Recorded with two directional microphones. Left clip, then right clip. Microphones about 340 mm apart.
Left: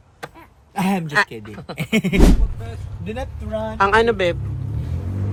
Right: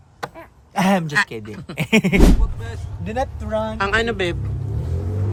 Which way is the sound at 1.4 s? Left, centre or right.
Centre.